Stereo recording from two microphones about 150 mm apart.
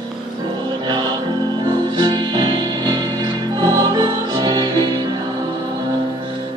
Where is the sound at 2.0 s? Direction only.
30° right (ahead or behind).